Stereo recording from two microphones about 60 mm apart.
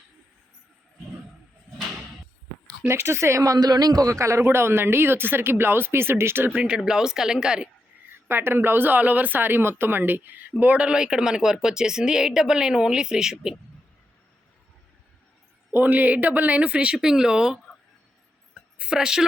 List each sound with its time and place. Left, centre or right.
2.8 s speech: right
3.4 s a man's voice: right
4.4 s speech: right
6.5 s speech: centre
8.1 s speech: right; by 13.6 s centre
15.7 s speech: right; by 17.6 s centre
18.8 s speech: centre